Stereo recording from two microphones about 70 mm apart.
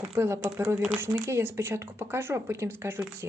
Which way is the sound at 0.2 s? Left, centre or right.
Right.